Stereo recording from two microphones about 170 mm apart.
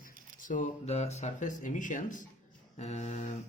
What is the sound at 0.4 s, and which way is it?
Speech, 45° left (ahead or behind).